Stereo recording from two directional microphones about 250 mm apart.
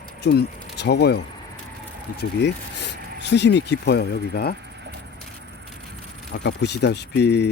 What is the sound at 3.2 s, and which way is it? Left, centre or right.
Speech, left.